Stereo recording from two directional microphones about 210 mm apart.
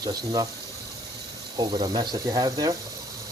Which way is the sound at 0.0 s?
15° right (ahead or behind).